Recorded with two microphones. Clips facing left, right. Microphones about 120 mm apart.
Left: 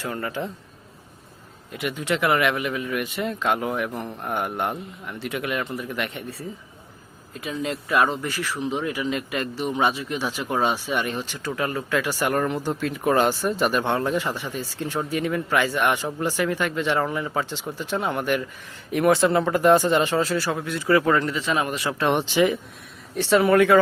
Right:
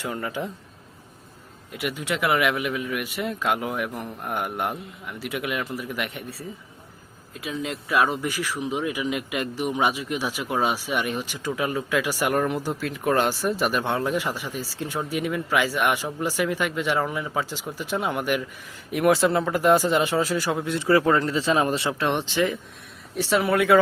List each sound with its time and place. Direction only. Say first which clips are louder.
0.0 s speech: left 1 dB; 10° right (ahead or behind)
1.7 s speech: left 2 dB; 5° right (ahead or behind)
7.3 s speech: left 2 dB; centre (ahead or behind); by 21.8 s 30° right (ahead or behind)
21.9 s speech: left 3 dB; 5° left (ahead or behind)
23.1 s speech: left 4 dB; 5° right (ahead or behind)